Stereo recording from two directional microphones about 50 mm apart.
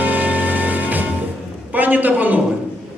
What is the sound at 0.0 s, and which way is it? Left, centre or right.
Music, right.